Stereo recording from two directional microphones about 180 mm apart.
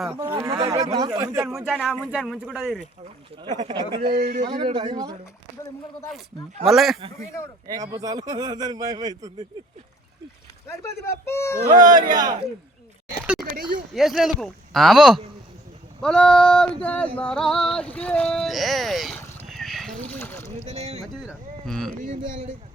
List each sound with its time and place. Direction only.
0.2 s a man's voice: 20° right (ahead or behind)
1.6 s speech: centre (ahead or behind)
3.7 s a man's voice: 25° right (ahead or behind)
4.0 s a man's voice: 55° right (ahead or behind)
4.4 s a man's voice: 25° right (ahead or behind)
6.7 s speech: centre (ahead or behind)
7.8 s a man's voice: 20° right (ahead or behind)
11.3 s speech: 15° left (ahead or behind)
11.7 s a man's voice: 20° right (ahead or behind)
13.4 s speech: 55° right (ahead or behind)
13.9 s speech: centre (ahead or behind)
19.5 s a sound: centre (ahead or behind)
20.5 s rowboat: 35° right (ahead or behind)
21.2 s a sound: 5° left (ahead or behind)